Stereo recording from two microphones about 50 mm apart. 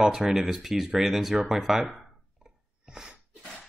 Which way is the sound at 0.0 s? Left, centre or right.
Centre.